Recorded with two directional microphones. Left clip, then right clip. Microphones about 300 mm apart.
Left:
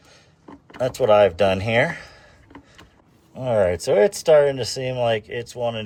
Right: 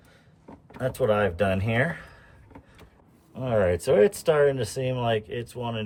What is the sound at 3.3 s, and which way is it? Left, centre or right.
Speech, centre.